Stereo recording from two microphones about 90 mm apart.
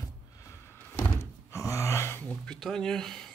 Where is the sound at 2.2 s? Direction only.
15° left (ahead or behind).